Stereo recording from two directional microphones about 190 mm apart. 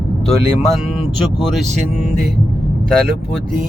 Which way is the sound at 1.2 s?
Centre (ahead or behind).